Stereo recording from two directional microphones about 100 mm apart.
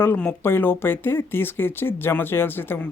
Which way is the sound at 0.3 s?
20° left (ahead or behind).